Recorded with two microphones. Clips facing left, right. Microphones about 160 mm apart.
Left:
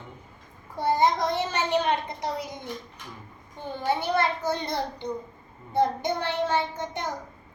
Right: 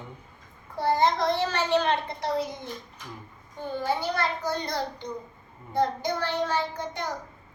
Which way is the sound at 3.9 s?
20° left (ahead or behind).